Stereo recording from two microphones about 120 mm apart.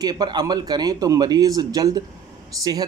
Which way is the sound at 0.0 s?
35° right (ahead or behind).